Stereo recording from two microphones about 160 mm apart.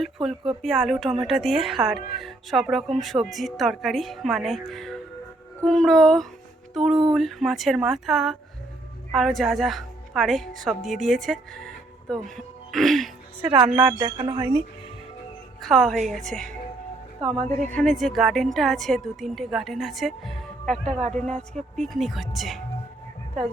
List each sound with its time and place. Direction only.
0.0 s a woman's voice: centre (ahead or behind)
12.7 s music: centre (ahead or behind)
13.7 s a woman's voice: 5° right (ahead or behind)
14.0 s a woman's voice: 35° right (ahead or behind)
15.6 s a woman's voice: 5° left (ahead or behind)
17.7 s a woman's voice: 5° left (ahead or behind)